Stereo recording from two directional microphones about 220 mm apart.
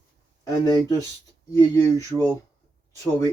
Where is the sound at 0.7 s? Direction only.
15° left (ahead or behind).